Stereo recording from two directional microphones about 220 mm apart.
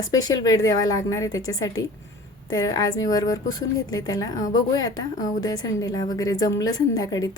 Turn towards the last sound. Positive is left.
turn(degrees=15)  # may be behind; listen again after turning